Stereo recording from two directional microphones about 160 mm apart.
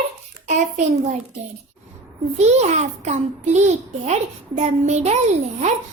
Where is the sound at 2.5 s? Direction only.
45° right (ahead or behind).